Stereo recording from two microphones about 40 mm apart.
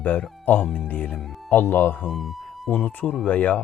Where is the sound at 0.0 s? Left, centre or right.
Left.